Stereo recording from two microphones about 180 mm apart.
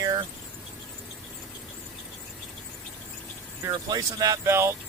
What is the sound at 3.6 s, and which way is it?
Speech, 20° right (ahead or behind).